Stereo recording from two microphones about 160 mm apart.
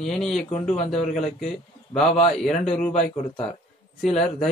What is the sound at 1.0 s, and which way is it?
A man's voice, 45° left (ahead or behind).